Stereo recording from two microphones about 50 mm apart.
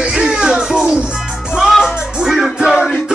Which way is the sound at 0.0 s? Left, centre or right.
Centre.